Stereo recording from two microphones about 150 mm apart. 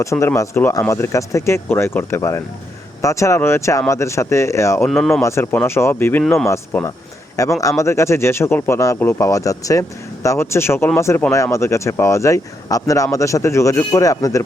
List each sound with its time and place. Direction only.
0.0 s speech: 20° left (ahead or behind)
4.9 s speech: 5° left (ahead or behind)
5.2 s speech: 20° left (ahead or behind)